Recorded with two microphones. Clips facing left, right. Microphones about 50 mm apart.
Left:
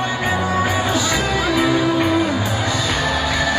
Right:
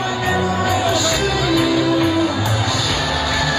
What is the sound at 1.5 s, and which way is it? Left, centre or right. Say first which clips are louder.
Music: right 1 dB; left.